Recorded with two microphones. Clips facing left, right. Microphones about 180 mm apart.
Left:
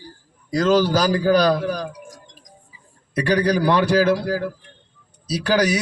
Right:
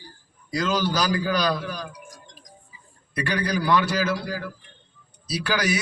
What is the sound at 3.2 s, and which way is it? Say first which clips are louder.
A man's voice: left 7 dB; 40° left (ahead or behind).